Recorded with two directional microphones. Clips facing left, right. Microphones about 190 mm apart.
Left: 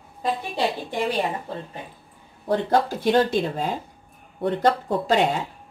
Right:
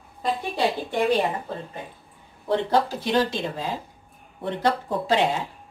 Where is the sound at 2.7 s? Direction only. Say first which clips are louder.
Left 2 dB; 50° left (ahead or behind).